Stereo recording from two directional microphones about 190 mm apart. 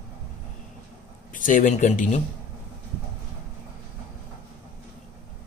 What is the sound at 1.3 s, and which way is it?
Speech, 45° left (ahead or behind).